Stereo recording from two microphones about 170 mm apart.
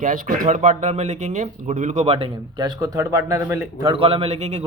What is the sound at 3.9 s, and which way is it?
Speech, 35° right (ahead or behind).